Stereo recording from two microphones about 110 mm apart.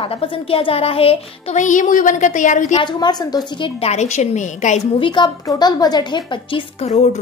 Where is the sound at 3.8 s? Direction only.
85° left.